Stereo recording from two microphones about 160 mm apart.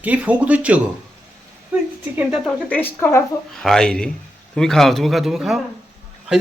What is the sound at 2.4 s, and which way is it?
Speech, 10° left (ahead or behind).